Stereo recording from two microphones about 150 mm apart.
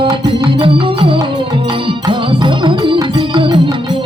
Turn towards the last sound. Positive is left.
turn(degrees=-30)  # may be behind; listen again after turning